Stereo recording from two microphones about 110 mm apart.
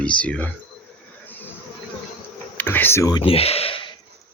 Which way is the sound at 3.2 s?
65° left (ahead or behind).